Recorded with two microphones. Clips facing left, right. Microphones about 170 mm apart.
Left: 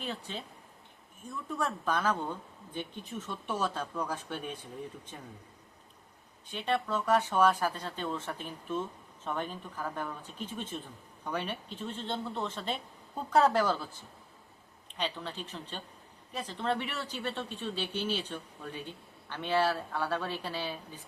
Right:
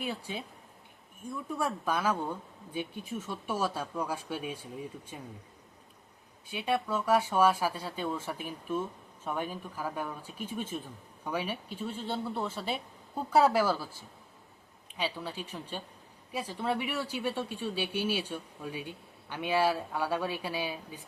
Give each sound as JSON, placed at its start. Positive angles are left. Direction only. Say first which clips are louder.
{"t": 0.0, "sound": "speech", "louder": "right 2 dB", "side_deg": -10}
{"t": 6.5, "sound": "speech", "louder": "right 1 dB", "side_deg": -10}
{"t": 14.9, "sound": "speech", "louder": "right 1 dB", "side_deg": -10}